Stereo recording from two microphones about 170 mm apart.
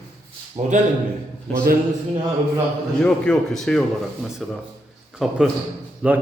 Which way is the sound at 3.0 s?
5° left (ahead or behind).